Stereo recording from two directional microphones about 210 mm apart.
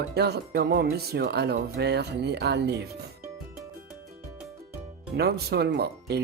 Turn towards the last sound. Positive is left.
turn(degrees=-50)  # may be behind; listen again after turning